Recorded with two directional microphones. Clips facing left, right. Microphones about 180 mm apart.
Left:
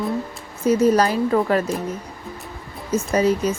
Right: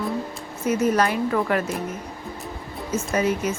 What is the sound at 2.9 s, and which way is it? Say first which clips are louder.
Speech: left 4 dB; 35° left (ahead or behind).